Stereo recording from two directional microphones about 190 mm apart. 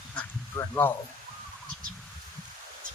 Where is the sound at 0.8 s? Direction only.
10° left (ahead or behind).